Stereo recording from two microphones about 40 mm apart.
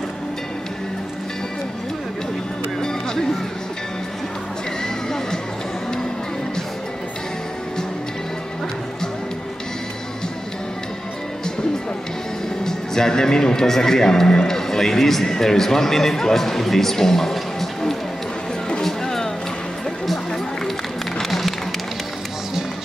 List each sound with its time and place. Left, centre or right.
2.8 s music: centre
4.8 s music: centre
12.6 s speech: centre
18.9 s music: centre
21.2 s music: centre